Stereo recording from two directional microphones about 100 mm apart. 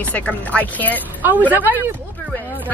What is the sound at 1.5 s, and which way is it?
Speech, 20° right (ahead or behind).